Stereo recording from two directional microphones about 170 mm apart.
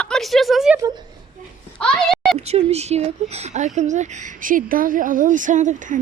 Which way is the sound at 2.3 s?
40° right (ahead or behind).